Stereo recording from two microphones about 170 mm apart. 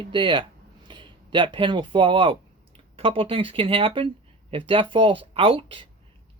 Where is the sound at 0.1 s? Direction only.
30° right (ahead or behind).